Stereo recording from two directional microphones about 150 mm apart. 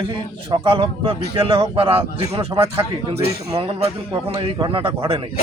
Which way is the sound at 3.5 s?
40° right (ahead or behind).